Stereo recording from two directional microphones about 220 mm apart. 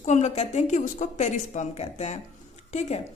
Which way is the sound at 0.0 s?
30° left (ahead or behind).